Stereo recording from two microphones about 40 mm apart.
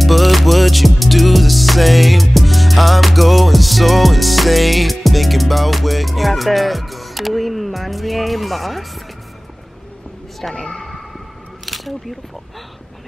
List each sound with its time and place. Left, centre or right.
0.0 s music: centre
10.5 s speech: left
11.6 s a sound: centre